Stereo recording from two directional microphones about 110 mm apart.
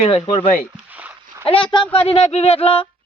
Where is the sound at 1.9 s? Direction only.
65° left (ahead or behind).